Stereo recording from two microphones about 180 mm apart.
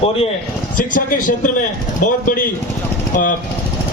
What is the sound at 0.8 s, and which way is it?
Speech, 50° left (ahead or behind).